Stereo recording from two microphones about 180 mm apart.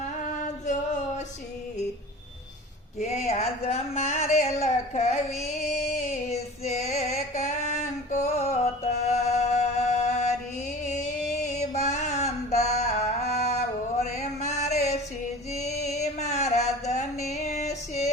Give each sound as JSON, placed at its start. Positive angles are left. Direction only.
{"t": 3.0, "sound": "a sound", "side_deg": 40}
{"t": 15.5, "sound": "mantra", "side_deg": 40}
{"t": 17.3, "sound": "music", "side_deg": 40}